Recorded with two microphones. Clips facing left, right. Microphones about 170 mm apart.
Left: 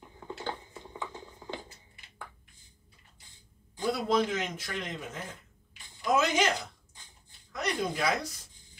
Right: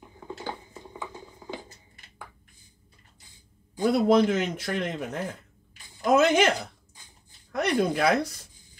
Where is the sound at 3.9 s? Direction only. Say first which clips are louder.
Right 9 dB; 65° right (ahead or behind).